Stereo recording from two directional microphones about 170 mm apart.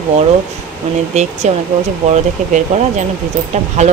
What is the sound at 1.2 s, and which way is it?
Speech, 40° right (ahead or behind).